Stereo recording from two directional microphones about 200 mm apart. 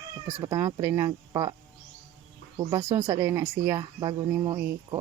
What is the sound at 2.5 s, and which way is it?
A woman's voice, 20° right (ahead or behind).